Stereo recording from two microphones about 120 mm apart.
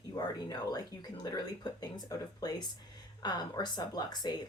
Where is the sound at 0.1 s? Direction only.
35° left (ahead or behind).